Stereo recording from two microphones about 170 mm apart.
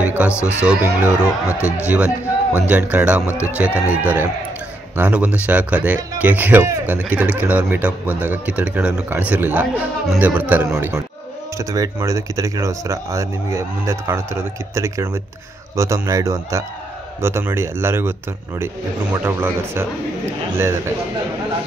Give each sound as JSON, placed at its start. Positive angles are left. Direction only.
{"t": 0.0, "sound": "music", "side_deg": -10}
{"t": 0.3, "sound": "speech", "side_deg": 15}
{"t": 1.9, "sound": "speech", "side_deg": -10}
{"t": 3.3, "sound": "speech", "side_deg": 15}
{"t": 3.5, "sound": "speech", "side_deg": -10}
{"t": 19.2, "sound": "speech", "side_deg": -10}